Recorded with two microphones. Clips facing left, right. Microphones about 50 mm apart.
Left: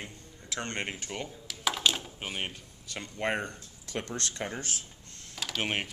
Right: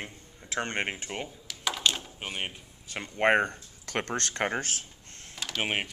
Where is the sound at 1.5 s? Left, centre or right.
Centre.